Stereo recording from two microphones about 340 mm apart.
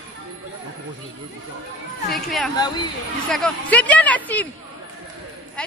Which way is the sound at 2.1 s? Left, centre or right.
Centre.